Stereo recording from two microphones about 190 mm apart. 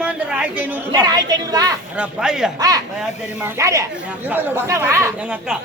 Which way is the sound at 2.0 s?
5° right (ahead or behind).